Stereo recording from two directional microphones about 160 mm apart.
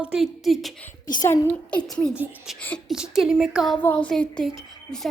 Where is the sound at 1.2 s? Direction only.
20° left (ahead or behind).